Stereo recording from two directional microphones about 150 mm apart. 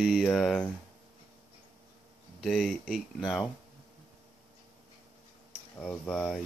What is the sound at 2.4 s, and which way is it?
Speech, 5° left (ahead or behind).